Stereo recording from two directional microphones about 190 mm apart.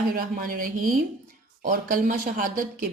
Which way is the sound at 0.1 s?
50° right (ahead or behind).